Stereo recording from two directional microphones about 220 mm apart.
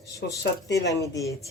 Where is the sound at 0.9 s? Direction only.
15° left (ahead or behind).